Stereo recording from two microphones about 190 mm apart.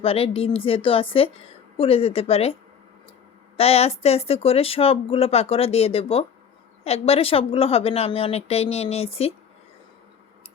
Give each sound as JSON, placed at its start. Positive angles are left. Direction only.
{"t": 0.0, "sound": "a woman's voice", "side_deg": 30}
{"t": 3.6, "sound": "speech", "side_deg": 30}